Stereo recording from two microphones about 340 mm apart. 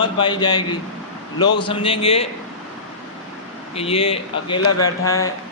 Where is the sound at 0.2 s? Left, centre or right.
Centre.